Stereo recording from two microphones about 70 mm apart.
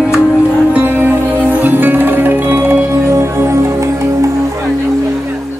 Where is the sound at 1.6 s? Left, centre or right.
Right.